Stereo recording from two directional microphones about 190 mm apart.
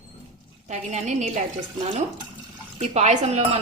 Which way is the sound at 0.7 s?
40° right (ahead or behind).